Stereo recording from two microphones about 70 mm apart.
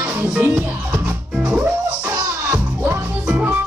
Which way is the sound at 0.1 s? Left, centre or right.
Right.